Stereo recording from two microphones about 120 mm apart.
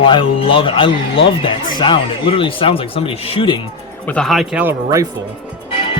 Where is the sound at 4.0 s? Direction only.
10° left (ahead or behind).